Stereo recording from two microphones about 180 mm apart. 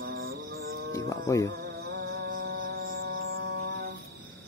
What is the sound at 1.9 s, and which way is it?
Music, 60° right (ahead or behind).